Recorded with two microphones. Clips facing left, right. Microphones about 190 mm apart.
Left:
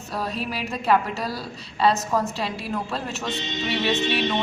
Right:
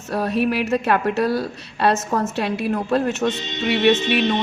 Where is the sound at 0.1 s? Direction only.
60° right (ahead or behind).